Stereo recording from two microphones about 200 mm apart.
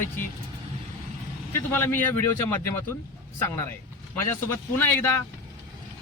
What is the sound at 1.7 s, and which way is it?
Speech, 10° left (ahead or behind).